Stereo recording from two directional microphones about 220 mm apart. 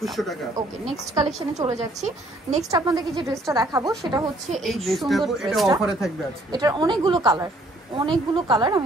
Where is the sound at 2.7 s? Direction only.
15° right (ahead or behind).